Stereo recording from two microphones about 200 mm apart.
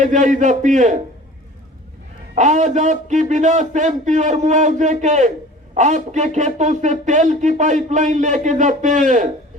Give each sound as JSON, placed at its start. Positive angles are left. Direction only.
{"t": 0.0, "sound": "speech", "side_deg": -40}
{"t": 2.3, "sound": "speech", "side_deg": -35}